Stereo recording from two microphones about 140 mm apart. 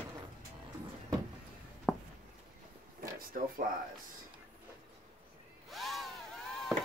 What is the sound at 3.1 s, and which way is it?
Speech, 90° right.